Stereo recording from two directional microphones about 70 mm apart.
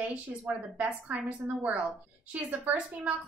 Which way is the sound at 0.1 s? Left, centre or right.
Right.